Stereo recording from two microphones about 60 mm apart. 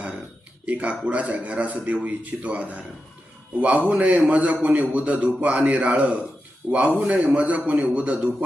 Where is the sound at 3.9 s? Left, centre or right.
Right.